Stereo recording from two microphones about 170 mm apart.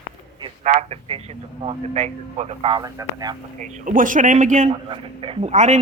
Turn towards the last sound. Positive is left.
turn(degrees=-45)  # may be behind; listen again after turning